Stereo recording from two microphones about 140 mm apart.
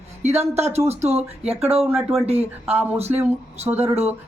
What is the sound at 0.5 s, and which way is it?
Speech, 50° right (ahead or behind).